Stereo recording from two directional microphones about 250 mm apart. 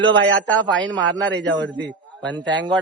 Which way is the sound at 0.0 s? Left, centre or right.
Right.